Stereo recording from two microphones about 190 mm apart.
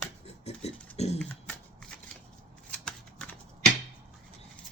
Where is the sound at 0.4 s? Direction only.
35° left (ahead or behind).